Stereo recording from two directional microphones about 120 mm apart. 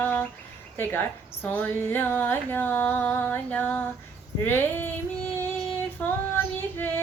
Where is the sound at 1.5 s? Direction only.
15° left (ahead or behind).